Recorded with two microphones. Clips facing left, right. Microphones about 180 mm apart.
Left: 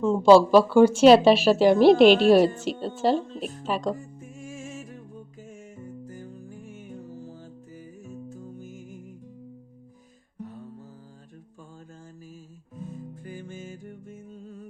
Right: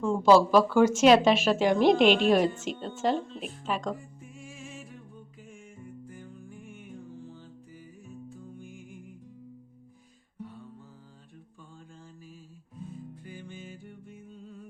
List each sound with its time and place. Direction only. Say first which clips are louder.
0.0 s a woman's voice: left 5 dB; 25° left (ahead or behind); by 4.9 s 45° left (ahead or behind)
5.4 s music: left 3 dB; 40° left (ahead or behind)
10.4 s music: left 4 dB; 45° left (ahead or behind)
13.2 s music: left 5 dB; 45° left (ahead or behind)